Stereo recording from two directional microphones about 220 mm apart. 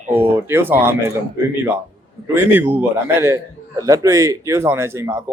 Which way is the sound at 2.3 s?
10° right (ahead or behind).